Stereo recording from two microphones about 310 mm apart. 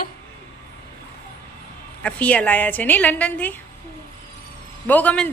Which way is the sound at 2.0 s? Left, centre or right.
Centre.